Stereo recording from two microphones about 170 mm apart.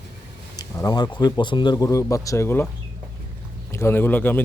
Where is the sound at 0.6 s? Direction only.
25° left (ahead or behind).